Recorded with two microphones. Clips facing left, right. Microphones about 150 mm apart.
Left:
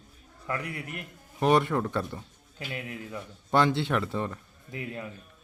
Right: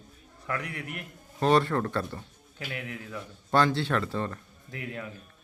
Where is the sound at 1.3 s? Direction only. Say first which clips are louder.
Even; 15° left (ahead or behind).